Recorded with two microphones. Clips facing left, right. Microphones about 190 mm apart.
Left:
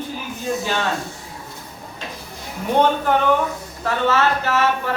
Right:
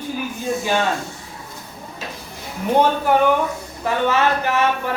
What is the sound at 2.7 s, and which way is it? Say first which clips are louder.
Speech: right 1 dB; 10° right (ahead or behind).